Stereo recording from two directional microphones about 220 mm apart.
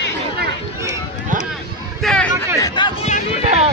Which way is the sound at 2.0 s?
5° left (ahead or behind).